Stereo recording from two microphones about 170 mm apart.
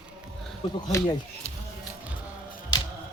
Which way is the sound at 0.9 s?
15° left (ahead or behind).